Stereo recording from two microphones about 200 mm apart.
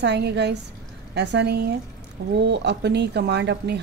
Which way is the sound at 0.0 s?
60° right (ahead or behind).